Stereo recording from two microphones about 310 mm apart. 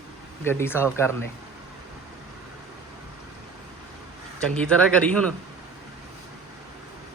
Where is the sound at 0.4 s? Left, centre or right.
Centre.